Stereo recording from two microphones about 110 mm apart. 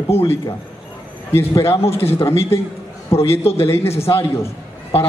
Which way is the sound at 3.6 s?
25° left (ahead or behind).